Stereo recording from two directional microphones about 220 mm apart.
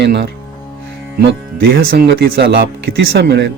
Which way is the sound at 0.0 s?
50° right (ahead or behind).